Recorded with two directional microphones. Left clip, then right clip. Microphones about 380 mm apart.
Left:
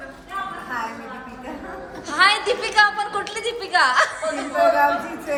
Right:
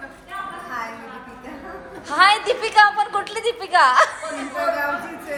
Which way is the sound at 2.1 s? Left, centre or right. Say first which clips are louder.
Right 2 dB; centre.